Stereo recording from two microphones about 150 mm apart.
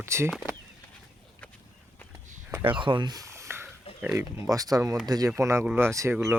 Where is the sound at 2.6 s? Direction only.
35° right (ahead or behind).